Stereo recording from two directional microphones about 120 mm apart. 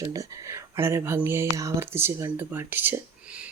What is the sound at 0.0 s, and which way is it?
Speech, 30° right (ahead or behind).